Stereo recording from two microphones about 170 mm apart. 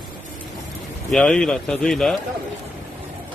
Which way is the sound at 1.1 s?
5° left (ahead or behind).